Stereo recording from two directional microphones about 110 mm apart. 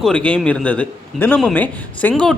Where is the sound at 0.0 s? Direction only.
10° left (ahead or behind).